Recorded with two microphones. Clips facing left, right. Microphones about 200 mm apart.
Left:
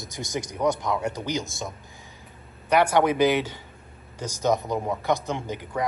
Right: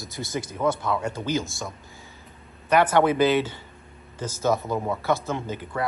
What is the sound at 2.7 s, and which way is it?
A woman's voice, 10° left (ahead or behind).